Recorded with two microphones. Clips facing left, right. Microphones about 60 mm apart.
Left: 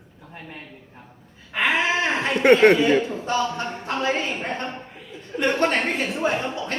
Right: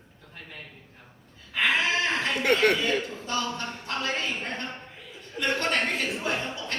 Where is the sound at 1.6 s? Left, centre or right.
Left.